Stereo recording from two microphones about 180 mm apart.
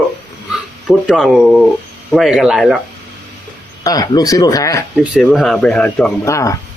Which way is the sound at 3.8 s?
20° left (ahead or behind).